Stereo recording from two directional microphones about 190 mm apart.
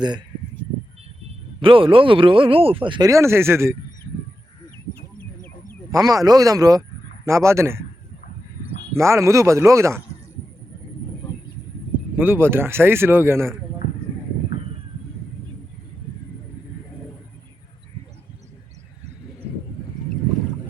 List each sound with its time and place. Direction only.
1.6 s speech: 25° right (ahead or behind)
5.9 s speech: 20° right (ahead or behind)
9.0 s speech: 15° right (ahead or behind)
12.1 s speech: 10° right (ahead or behind)